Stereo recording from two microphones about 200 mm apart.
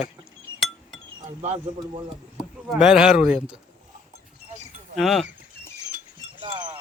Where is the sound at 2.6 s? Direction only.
Centre (ahead or behind).